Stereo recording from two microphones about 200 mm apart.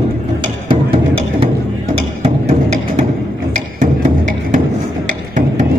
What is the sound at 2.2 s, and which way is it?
Music, 35° right (ahead or behind).